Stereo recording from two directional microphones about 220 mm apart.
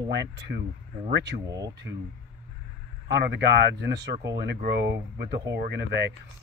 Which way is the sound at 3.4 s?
50° right (ahead or behind).